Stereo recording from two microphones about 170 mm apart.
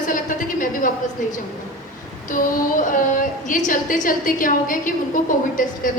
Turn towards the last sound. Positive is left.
turn(degrees=55)  # may be behind; listen again after turning